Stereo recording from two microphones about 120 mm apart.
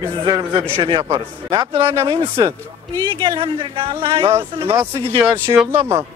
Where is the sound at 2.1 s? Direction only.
35° right (ahead or behind).